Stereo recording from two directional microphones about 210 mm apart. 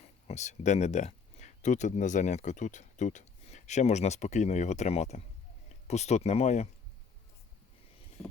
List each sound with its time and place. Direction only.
0.3 s speech: 35° left (ahead or behind)